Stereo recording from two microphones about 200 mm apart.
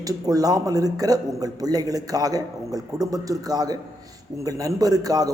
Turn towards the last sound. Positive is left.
turn(degrees=-20)  # may be behind; listen again after turning